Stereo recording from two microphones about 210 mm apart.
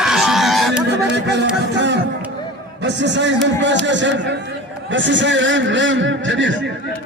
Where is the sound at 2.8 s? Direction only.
60° right (ahead or behind).